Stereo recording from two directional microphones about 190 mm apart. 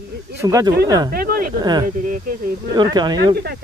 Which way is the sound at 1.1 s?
50° right (ahead or behind).